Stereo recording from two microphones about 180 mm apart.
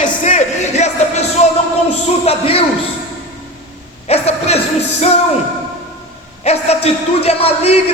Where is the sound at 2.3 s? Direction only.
35° left (ahead or behind).